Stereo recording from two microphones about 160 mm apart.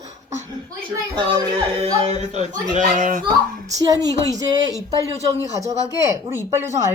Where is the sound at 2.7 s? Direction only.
55° right (ahead or behind).